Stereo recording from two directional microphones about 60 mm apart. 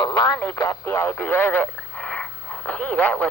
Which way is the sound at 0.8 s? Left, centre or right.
Left.